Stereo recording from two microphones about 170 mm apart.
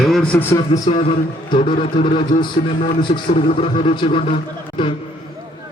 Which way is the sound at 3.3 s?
35° left (ahead or behind).